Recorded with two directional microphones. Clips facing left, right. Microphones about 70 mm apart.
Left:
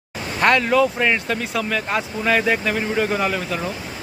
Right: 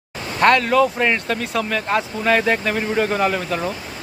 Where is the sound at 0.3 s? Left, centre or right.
Centre.